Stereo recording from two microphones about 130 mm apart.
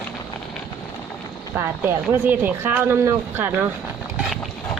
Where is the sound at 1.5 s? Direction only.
15° right (ahead or behind).